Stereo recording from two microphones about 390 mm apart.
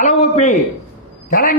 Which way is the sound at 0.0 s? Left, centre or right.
Centre.